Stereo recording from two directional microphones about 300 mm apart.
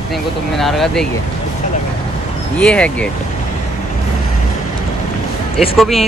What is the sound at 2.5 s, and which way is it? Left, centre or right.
Speech, centre.